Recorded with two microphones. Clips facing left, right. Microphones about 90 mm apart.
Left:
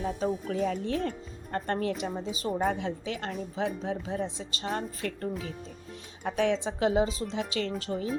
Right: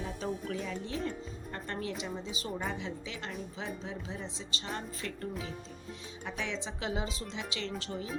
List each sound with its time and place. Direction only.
0.0 s a woman's voice: 45° left (ahead or behind)